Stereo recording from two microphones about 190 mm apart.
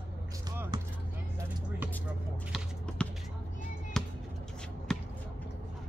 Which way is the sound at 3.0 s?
5° left (ahead or behind).